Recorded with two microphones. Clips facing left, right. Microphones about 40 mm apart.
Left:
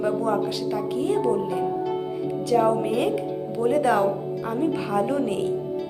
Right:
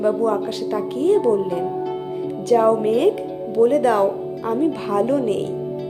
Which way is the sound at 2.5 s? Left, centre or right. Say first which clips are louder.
Right 5 dB; centre.